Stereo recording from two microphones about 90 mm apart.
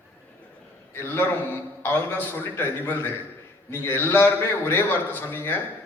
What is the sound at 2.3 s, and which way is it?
A man's voice, 25° left (ahead or behind).